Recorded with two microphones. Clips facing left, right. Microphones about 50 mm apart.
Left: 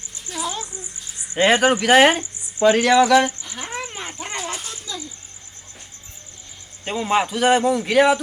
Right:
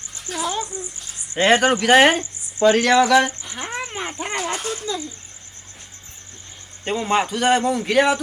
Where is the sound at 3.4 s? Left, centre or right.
Centre.